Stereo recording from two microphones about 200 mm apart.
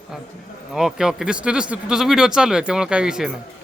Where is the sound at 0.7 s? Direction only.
5° right (ahead or behind).